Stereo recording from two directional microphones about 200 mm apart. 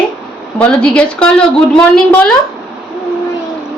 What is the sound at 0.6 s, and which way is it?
Speech, 5° left (ahead or behind).